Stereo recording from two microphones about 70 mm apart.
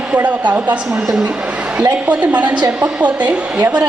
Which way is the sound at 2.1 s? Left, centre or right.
Right.